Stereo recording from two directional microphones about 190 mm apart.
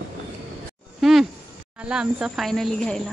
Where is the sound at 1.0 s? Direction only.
Centre (ahead or behind).